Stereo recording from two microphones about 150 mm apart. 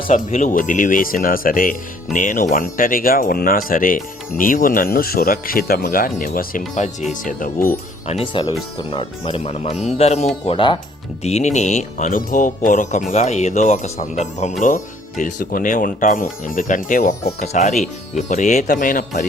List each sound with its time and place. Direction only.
0.1 s speech: 60° left (ahead or behind)
2.1 s speech: 60° left (ahead or behind)
6.7 s speech: 55° left (ahead or behind)
8.2 s speech: 35° left (ahead or behind); by 14.5 s 50° left (ahead or behind)
15.2 s speech: 65° left (ahead or behind)
17.4 s speech: 45° left (ahead or behind)